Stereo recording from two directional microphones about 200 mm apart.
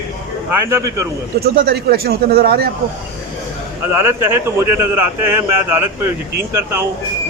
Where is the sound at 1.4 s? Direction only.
50° right (ahead or behind).